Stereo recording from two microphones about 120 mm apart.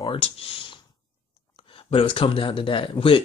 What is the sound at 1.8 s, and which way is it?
Speech, 50° left (ahead or behind).